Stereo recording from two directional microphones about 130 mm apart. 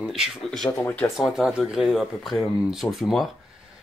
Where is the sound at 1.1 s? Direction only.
5° right (ahead or behind).